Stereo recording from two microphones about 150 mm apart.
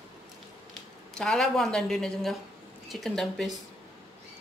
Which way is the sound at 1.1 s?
5° left (ahead or behind).